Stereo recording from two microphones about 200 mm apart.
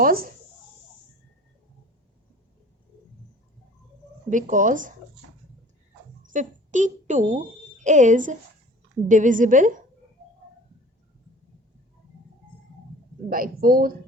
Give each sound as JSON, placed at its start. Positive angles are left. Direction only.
{"t": 0.0, "sound": "speech", "side_deg": -45}
{"t": 4.3, "sound": "a woman's voice", "side_deg": -40}
{"t": 6.2, "sound": "a woman's voice", "side_deg": -40}
{"t": 13.3, "sound": "speech", "side_deg": -45}